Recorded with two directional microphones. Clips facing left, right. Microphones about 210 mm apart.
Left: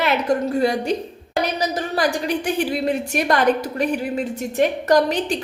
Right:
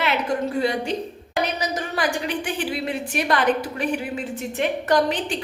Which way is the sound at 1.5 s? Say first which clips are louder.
Left 4 dB; 35° left (ahead or behind).